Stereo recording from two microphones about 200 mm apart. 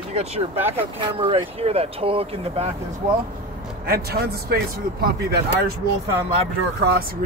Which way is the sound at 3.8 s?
50° right (ahead or behind).